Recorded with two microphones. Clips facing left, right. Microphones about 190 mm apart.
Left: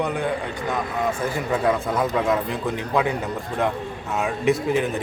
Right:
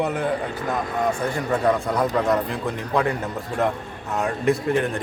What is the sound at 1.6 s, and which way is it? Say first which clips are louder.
A man's voice: right 1 dB; centre (ahead or behind).